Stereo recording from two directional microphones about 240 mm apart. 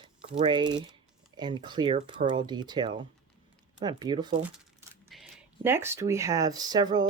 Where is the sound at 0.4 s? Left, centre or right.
Centre.